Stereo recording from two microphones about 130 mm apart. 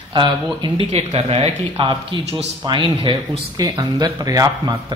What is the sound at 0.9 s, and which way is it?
Speech, 50° right (ahead or behind).